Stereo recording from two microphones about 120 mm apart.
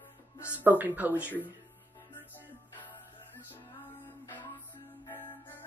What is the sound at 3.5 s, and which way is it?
Music, 15° left (ahead or behind).